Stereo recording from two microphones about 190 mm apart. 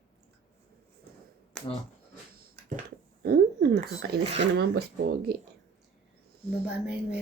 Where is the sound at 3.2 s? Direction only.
60° right (ahead or behind).